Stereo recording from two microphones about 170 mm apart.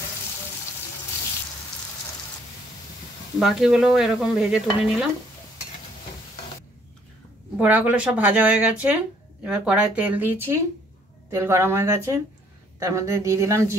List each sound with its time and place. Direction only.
3.3 s stir: centre (ahead or behind)
7.5 s speech: 10° right (ahead or behind)